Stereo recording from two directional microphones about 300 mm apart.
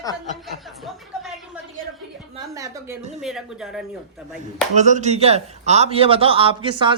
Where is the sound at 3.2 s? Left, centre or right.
Centre.